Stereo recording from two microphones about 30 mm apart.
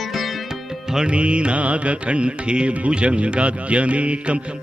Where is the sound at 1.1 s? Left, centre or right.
Right.